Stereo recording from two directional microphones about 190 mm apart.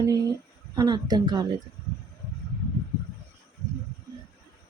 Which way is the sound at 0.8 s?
20° right (ahead or behind).